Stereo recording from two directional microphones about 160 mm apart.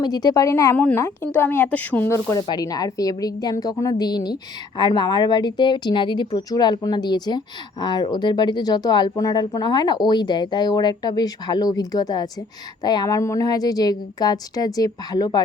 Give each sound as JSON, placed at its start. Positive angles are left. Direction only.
{"t": 0.0, "sound": "speech", "side_deg": 25}